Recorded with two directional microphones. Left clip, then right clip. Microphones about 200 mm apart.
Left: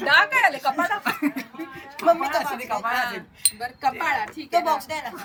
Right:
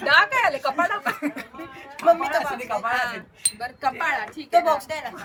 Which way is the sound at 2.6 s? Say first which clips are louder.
Even; 10° right (ahead or behind).